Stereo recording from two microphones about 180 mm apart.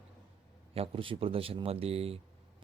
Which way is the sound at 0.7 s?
30° right (ahead or behind).